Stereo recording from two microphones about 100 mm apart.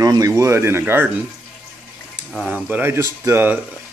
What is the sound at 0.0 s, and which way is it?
Speech, 35° right (ahead or behind).